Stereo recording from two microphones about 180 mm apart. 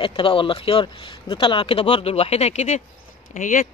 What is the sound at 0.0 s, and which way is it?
Speech, 30° left (ahead or behind).